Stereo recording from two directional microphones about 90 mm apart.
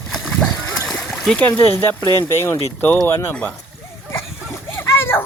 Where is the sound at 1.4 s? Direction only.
20° left (ahead or behind).